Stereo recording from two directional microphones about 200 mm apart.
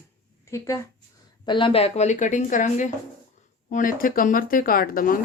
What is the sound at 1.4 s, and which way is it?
A woman's voice, 25° left (ahead or behind).